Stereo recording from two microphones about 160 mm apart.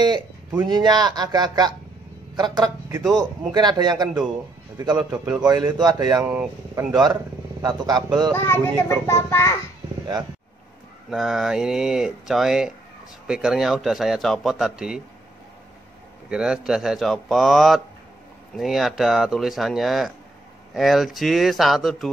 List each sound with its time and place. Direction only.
0.0 s speech: 25° right (ahead or behind)
5.1 s speech: 10° right (ahead or behind)
5.4 s speech: 25° right (ahead or behind)
6.2 s speech: 10° right (ahead or behind)
7.6 s speech: 25° right (ahead or behind)
8.3 s a child's voice: 15° left (ahead or behind)
11.1 s a man's voice: centre (ahead or behind)
16.3 s a man's voice: 5° right (ahead or behind)